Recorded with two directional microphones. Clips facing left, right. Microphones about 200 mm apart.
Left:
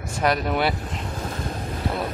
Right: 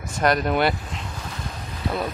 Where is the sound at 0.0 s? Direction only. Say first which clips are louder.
Right 1 dB; 5° left (ahead or behind).